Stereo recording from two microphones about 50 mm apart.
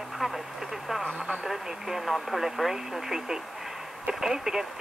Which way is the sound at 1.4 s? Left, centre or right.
Centre.